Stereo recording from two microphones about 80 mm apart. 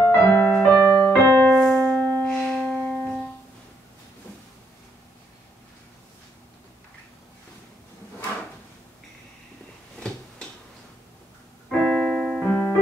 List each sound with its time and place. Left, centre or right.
0.0 s music: left
0.7 s piano: left
9.9 s a sound: centre
11.7 s keyboard: centre
12.4 s music: left